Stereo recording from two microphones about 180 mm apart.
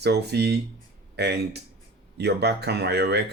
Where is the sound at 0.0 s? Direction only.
65° right (ahead or behind).